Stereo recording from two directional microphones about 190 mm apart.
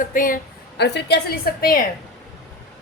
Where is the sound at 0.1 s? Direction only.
45° left (ahead or behind).